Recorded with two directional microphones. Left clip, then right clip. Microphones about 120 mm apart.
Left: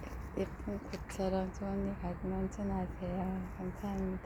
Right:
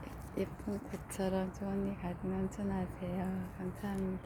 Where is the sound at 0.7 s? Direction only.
15° right (ahead or behind).